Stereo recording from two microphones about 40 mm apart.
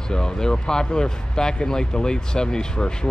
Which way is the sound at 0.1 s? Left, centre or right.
Centre.